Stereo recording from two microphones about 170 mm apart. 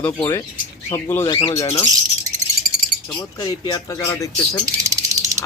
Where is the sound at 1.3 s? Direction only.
30° left (ahead or behind).